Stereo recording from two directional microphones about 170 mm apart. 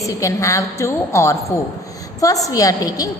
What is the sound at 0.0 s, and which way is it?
A woman's voice, 20° left (ahead or behind).